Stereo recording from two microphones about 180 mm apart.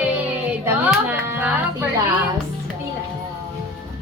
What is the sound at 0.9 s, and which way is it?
Music, 10° right (ahead or behind).